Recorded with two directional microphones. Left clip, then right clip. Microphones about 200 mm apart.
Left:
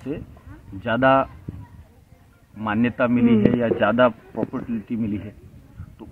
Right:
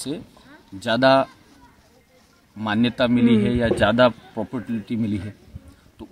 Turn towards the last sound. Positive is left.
turn(degrees=-15)  # may be behind; listen again after turning